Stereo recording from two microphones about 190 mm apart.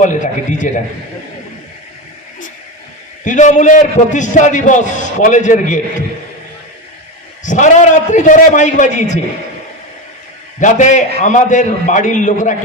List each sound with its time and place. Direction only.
0.0 s a man's voice: 40° left (ahead or behind)
3.2 s a man's voice: 40° left (ahead or behind)
7.4 s a man's voice: 40° left (ahead or behind)
10.6 s a man's voice: 40° left (ahead or behind)